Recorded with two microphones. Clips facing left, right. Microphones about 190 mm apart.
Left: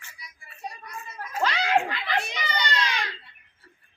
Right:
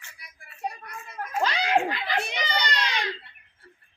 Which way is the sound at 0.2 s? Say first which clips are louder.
Left 3 dB; 55° right (ahead or behind).